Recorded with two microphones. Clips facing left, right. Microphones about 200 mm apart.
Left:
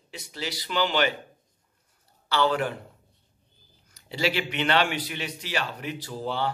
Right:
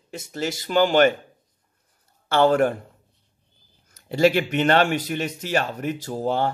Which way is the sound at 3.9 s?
50° right (ahead or behind).